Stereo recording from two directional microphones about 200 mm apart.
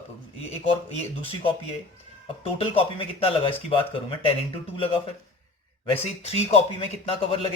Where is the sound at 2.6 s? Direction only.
30° left (ahead or behind).